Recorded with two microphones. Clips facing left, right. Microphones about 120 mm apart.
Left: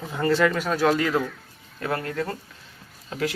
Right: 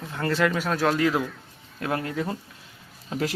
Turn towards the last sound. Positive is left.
turn(degrees=-30)  # may be behind; listen again after turning